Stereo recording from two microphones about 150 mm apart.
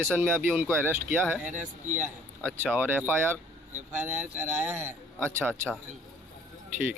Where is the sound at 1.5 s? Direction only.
60° right (ahead or behind).